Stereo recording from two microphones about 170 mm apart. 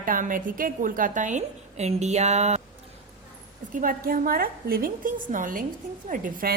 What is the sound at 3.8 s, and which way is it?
A woman's voice, 55° right (ahead or behind).